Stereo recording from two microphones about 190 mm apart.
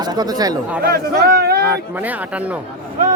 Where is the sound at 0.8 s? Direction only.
55° right (ahead or behind).